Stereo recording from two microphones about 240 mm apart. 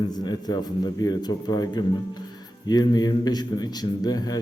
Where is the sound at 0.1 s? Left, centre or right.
Centre.